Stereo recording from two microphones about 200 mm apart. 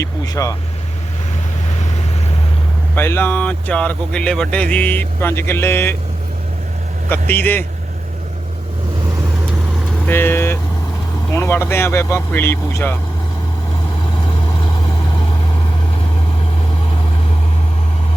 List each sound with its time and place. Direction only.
0.0 s speech: 15° left (ahead or behind)
2.9 s speech: 10° left (ahead or behind)
7.1 s speech: 10° left (ahead or behind)
10.1 s speech: 10° left (ahead or behind)